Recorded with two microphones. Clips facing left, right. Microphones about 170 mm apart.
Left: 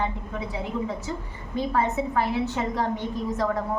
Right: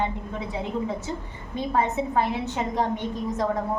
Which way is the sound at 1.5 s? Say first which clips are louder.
Even; 20° right (ahead or behind).